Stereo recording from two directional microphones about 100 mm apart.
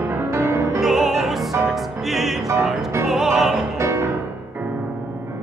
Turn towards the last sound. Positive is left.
turn(degrees=-30)  # may be behind; listen again after turning